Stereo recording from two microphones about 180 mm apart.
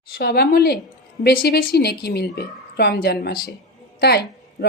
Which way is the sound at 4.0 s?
65° left (ahead or behind).